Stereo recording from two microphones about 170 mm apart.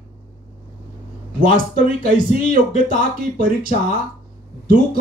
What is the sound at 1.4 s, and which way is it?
Speech, 55° right (ahead or behind).